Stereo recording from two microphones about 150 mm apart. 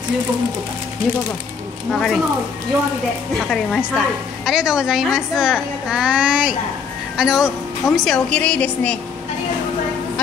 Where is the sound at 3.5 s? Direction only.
5° left (ahead or behind).